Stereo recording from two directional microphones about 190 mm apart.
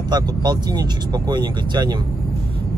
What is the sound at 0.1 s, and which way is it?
Speech, 20° right (ahead or behind).